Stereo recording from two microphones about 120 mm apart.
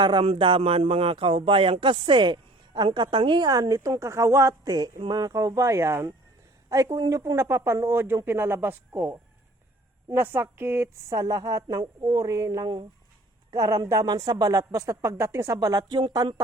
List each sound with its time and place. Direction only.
0.0 s speech: 40° right (ahead or behind); by 9.0 s 15° right (ahead or behind)
10.1 s speech: 20° right (ahead or behind); by 16.3 s 35° right (ahead or behind)